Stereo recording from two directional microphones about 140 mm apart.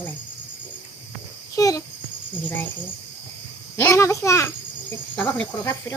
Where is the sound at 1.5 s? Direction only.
25° left (ahead or behind).